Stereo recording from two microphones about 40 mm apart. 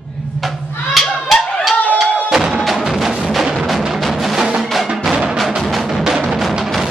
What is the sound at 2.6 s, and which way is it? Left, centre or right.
Music, centre.